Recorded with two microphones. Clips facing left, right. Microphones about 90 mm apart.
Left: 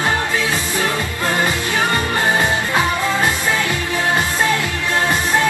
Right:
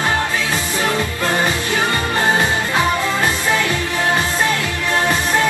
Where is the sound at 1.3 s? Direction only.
20° right (ahead or behind).